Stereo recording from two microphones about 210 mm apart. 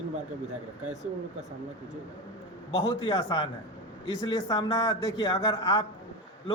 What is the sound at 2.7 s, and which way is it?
Speech, 25° left (ahead or behind).